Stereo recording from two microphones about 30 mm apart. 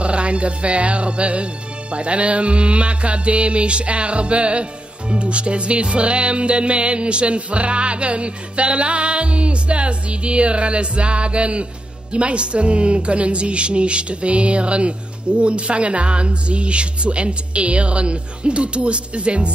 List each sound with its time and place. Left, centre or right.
0.0 s speech: right